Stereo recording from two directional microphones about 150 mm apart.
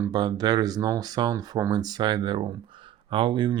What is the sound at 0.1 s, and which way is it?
Speech, 25° right (ahead or behind).